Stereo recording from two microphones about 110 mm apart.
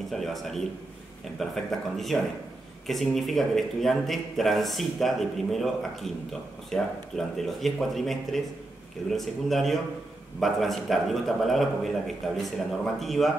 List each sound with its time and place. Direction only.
0.1 s speech: centre (ahead or behind)